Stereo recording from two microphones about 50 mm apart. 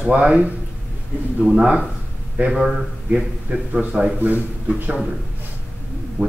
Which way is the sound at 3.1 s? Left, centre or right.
Right.